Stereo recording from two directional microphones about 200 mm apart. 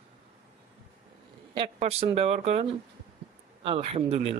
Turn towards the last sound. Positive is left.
turn(degrees=-30)  # may be behind; listen again after turning